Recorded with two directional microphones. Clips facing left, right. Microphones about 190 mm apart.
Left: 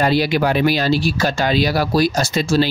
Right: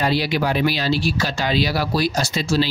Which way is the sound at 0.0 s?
50° left (ahead or behind).